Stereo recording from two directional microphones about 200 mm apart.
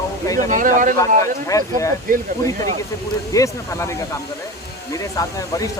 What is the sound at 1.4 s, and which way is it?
Speech, 15° left (ahead or behind).